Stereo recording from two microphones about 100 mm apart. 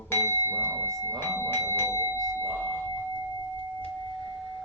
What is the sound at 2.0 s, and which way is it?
Doorbell, 35° right (ahead or behind).